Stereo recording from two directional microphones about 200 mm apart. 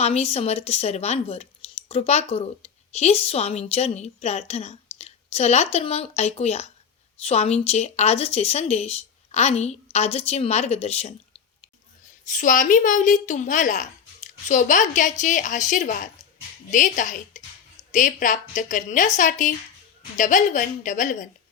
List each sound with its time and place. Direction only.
0.0 s speech: 30° left (ahead or behind)
12.2 s speech: 40° left (ahead or behind)